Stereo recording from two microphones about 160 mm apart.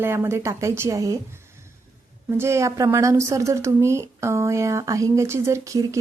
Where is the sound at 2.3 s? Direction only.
15° right (ahead or behind).